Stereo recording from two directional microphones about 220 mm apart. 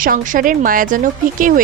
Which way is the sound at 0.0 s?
40° right (ahead or behind).